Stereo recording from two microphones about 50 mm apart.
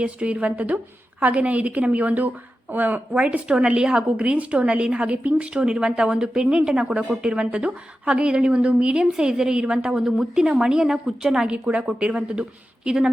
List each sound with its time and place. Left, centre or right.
0.0 s a woman's voice: right
3.1 s a woman's voice: right; by 11.5 s centre
11.5 s a woman's voice: right